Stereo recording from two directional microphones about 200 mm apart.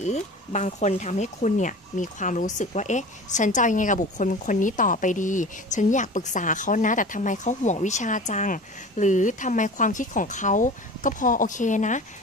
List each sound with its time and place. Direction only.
0.0 s speech: 35° left (ahead or behind)